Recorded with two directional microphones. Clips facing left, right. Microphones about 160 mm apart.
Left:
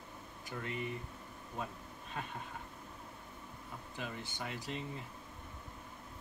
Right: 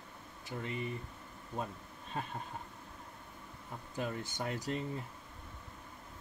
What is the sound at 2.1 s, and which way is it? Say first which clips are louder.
Speech: right 3 dB; 35° right (ahead or behind).